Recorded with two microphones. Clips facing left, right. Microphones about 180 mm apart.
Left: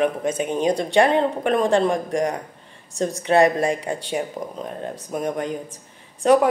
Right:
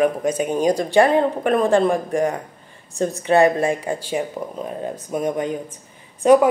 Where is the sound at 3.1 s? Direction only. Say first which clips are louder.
Right 1 dB; 30° right (ahead or behind).